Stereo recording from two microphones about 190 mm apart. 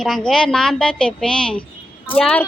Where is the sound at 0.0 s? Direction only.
Centre (ahead or behind).